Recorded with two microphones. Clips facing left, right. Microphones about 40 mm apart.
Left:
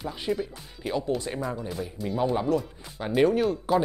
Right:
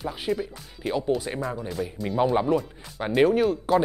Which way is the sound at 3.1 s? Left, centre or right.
Centre.